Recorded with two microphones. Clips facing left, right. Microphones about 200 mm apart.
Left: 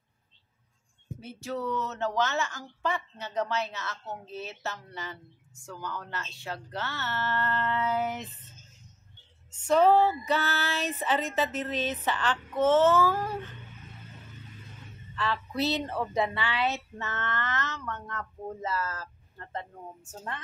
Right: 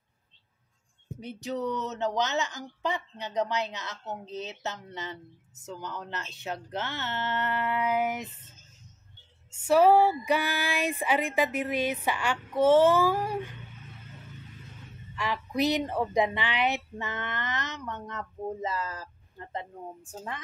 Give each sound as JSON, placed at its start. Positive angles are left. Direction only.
{"t": 1.2, "sound": "a woman's voice", "side_deg": -20}
{"t": 9.5, "sound": "a woman's voice", "side_deg": -10}
{"t": 15.1, "sound": "a woman's voice", "side_deg": -15}